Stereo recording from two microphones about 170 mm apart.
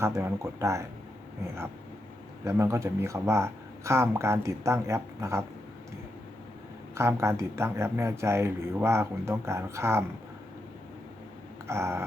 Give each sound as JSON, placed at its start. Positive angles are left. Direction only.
{"t": 0.0, "sound": "speech", "side_deg": -15}
{"t": 2.4, "sound": "speech", "side_deg": -15}
{"t": 6.9, "sound": "speech", "side_deg": -15}
{"t": 11.7, "sound": "speech", "side_deg": -15}